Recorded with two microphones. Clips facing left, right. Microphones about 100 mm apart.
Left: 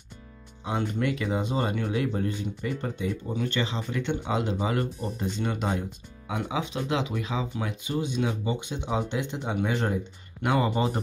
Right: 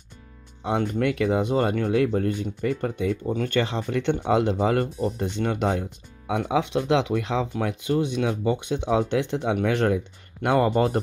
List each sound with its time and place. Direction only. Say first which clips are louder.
0.7 s speech: right 4 dB; 65° right (ahead or behind)